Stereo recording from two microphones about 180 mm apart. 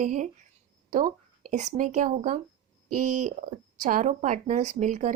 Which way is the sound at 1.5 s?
45° right (ahead or behind).